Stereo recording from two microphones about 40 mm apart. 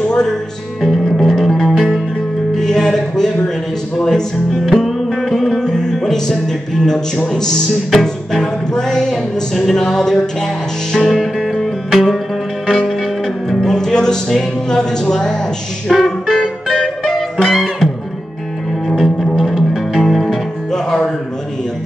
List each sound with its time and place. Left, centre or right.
0.7 s music: centre
4.0 s speech: centre
4.8 s music: centre
8.7 s music: centre
11.0 s music: centre
13.7 s music: centre
15.9 s music: centre
16.3 s music: centre
17.0 s music: centre
18.9 s music: centre